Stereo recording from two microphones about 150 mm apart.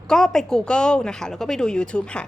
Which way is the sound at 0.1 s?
5° left (ahead or behind).